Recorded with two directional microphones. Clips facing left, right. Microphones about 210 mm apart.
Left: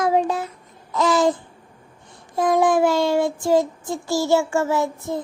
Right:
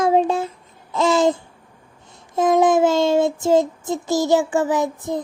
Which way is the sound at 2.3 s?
20° right (ahead or behind).